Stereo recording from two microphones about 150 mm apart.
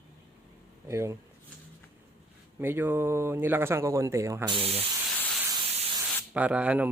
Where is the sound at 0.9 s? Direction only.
20° right (ahead or behind).